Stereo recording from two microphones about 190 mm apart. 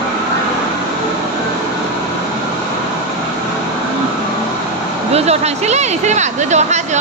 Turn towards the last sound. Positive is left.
turn(degrees=-40)  # may be behind; listen again after turning